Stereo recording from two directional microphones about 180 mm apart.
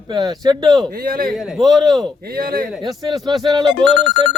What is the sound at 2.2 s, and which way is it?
Speech, 55° right (ahead or behind).